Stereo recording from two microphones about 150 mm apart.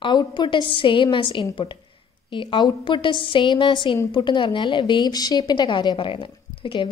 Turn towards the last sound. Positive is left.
turn(degrees=35)  # may be behind; listen again after turning